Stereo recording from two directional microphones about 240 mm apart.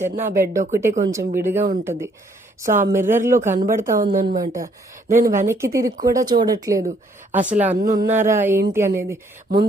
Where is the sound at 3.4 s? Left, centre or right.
Right.